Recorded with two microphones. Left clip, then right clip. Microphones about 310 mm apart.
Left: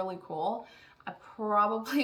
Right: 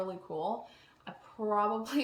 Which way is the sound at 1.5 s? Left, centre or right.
Centre.